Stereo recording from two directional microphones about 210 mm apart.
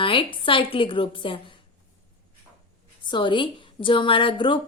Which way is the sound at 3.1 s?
25° left (ahead or behind).